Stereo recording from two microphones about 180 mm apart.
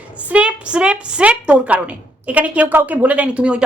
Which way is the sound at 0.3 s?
5° right (ahead or behind).